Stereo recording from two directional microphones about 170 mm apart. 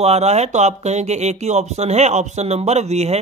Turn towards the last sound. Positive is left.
turn(degrees=-40)  # may be behind; listen again after turning